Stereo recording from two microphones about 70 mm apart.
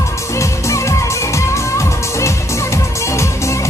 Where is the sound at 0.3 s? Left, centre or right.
Left.